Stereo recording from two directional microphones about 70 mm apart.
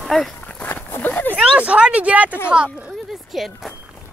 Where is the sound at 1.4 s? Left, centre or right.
Centre.